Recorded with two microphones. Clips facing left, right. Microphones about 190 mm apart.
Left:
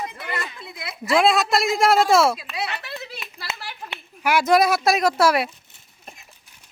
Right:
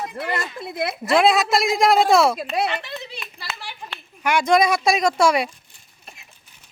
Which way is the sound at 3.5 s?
20° left (ahead or behind).